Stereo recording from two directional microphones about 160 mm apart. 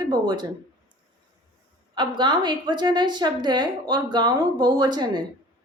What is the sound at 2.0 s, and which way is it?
A woman's voice, 30° right (ahead or behind).